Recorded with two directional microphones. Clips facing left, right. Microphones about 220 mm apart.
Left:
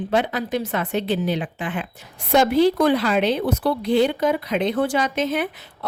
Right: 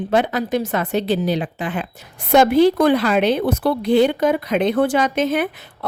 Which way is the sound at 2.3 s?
55° right (ahead or behind).